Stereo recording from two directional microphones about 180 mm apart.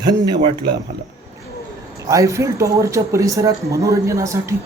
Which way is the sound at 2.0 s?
15° right (ahead or behind).